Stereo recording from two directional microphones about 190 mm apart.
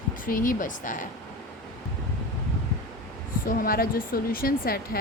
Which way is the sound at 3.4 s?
50° left (ahead or behind).